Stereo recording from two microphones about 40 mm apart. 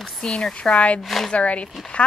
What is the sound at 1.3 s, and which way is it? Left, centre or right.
Speech, left.